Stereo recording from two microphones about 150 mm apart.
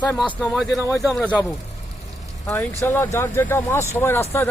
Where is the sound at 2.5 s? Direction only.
15° left (ahead or behind).